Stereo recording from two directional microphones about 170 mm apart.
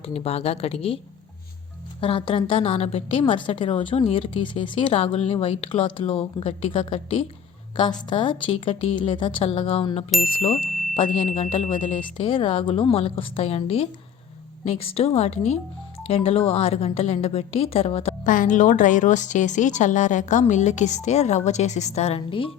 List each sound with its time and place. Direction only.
0.0 s a woman's voice: 35° left (ahead or behind)
2.0 s a woman's voice: 30° left (ahead or behind)
18.3 s a woman's voice: 50° left (ahead or behind); by 22.5 s 30° left (ahead or behind)